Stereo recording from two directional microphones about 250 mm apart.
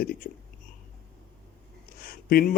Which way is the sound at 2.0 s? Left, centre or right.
Left.